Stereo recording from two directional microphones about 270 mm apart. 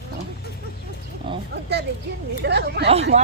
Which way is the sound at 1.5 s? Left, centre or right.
Right.